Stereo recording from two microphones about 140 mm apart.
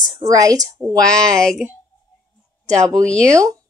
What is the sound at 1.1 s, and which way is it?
Speech, 5° left (ahead or behind).